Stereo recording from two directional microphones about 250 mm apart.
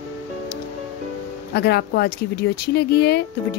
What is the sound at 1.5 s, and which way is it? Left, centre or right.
Speech, left.